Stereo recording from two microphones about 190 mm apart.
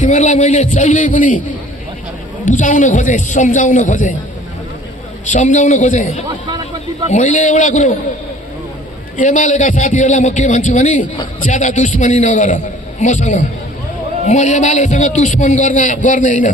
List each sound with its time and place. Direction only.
0.0 s a man's voice: 40° left (ahead or behind)
2.4 s a man's voice: 40° left (ahead or behind)
5.3 s a man's voice: 40° left (ahead or behind)
6.4 s speech: 25° right (ahead or behind)
7.1 s a man's voice: 40° left (ahead or behind)
9.1 s a man's voice: 40° left (ahead or behind)